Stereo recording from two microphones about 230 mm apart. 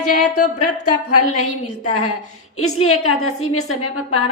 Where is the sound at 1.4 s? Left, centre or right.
Left.